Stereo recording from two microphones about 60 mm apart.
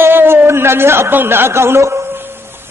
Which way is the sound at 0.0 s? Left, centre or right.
Right.